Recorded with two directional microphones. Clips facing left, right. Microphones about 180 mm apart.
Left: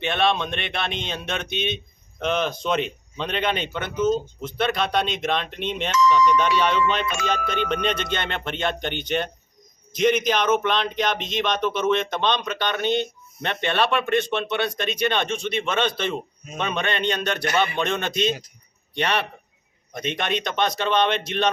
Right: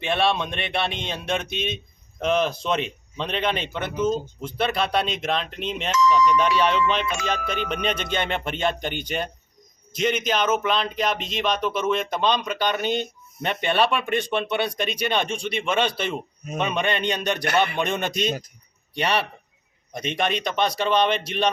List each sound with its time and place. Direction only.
0.0 s speech: 5° right (ahead or behind)